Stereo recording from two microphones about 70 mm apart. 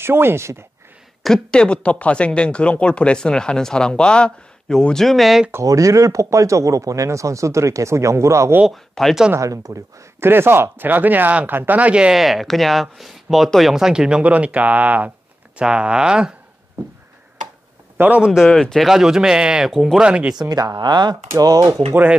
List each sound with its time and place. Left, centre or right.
0.0 s speech: right
1.2 s speech: centre
5.6 s speech: right
8.6 s speech: centre
9.4 s speech: right
10.2 s speech: right; by 12.2 s centre
12.2 s speech: centre
17.9 s a man's voice: right
18.2 s speech: centre
18.5 s speech: centre
20.0 s speech: centre
20.3 s speech: right
21.4 s speech: right